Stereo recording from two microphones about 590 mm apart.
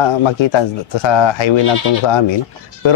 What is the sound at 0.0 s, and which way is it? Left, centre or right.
Speech, left.